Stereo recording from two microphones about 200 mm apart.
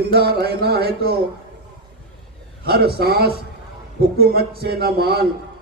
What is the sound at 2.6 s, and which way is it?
A man's voice, 50° right (ahead or behind).